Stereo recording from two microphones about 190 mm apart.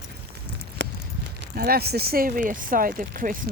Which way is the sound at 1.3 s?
55° right (ahead or behind).